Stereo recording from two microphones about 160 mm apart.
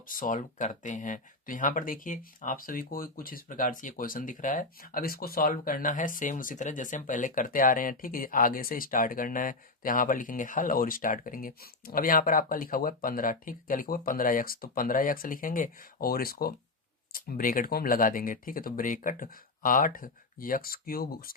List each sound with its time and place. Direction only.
0.1 s speech: 55° left (ahead or behind)